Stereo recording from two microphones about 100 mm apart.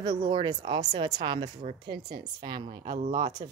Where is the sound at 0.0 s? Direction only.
45° right (ahead or behind).